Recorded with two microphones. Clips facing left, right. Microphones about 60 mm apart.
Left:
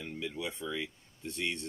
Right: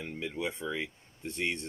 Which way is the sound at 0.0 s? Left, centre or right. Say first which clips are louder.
Right 3 dB; right.